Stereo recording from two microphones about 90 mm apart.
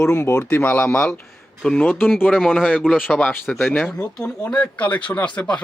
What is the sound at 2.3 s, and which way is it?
Speech, centre (ahead or behind).